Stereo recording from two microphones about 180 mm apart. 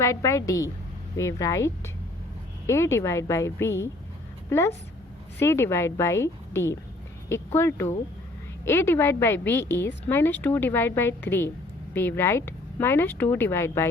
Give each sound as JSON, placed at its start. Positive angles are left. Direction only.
{"t": 0.0, "sound": "a woman's voice", "side_deg": 15}